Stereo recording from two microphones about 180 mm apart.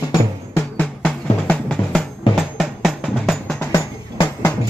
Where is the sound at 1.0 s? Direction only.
5° left (ahead or behind).